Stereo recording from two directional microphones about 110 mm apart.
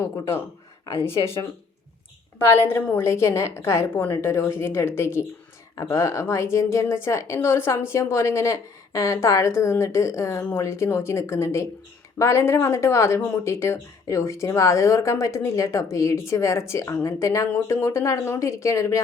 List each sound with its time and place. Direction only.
0.9 s speech: 25° left (ahead or behind)
2.6 s speech: 20° left (ahead or behind)